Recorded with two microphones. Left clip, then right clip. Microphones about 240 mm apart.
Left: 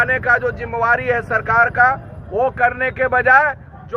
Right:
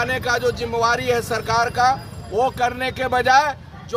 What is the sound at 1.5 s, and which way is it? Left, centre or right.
Speech, centre.